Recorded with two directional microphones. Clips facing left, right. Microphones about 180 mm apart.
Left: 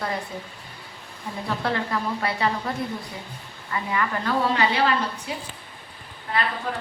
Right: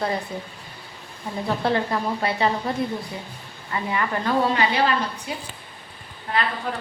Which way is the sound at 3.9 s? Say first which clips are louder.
Right 1 dB; 25° right (ahead or behind).